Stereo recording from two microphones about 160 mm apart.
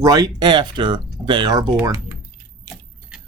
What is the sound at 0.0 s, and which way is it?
Speech, 25° right (ahead or behind).